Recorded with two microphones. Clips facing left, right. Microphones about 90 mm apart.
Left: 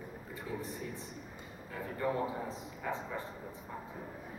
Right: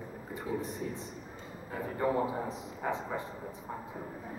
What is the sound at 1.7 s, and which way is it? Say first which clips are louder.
A man's voice: right 4 dB; 20° right (ahead or behind).